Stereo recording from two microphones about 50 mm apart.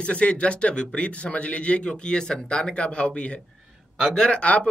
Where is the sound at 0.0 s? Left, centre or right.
Left.